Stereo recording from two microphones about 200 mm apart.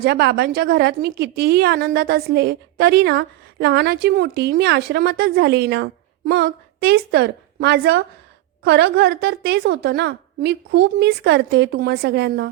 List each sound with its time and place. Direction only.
0.0 s a woman's voice: 55° right (ahead or behind)